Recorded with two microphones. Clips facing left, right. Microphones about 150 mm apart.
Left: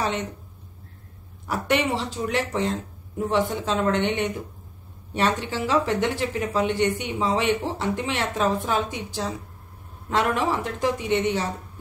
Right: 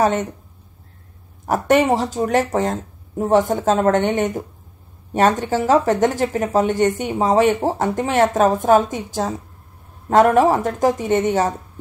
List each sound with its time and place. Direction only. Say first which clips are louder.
0.0 s speech: right 9 dB; 45° right (ahead or behind)
1.4 s speech: right 8 dB; 45° right (ahead or behind)